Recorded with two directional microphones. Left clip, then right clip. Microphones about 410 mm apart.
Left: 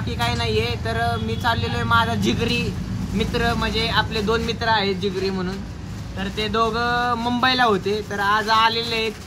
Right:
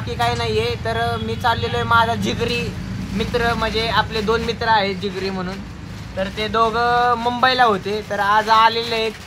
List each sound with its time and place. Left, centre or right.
0.2 s speech: centre